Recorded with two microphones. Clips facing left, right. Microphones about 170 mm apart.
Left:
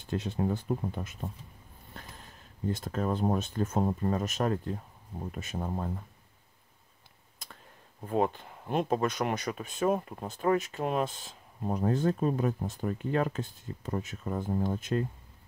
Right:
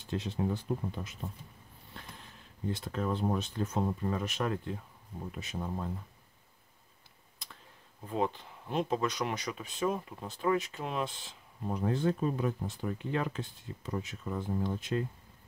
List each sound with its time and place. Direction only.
0.0 s speech: 50° left (ahead or behind)
2.0 s a sound: 45° left (ahead or behind)
2.7 s speech: 45° left (ahead or behind)
8.1 s speech: 50° left (ahead or behind)